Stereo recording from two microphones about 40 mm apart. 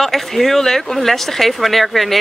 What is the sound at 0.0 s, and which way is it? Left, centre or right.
Speech, centre.